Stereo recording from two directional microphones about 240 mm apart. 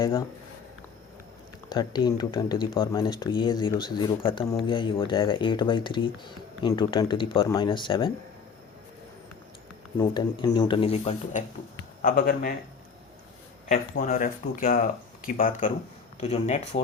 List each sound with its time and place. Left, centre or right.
0.0 s speech: centre
1.7 s speech: centre
10.0 s speech: centre
12.0 s speech: left
13.7 s speech: left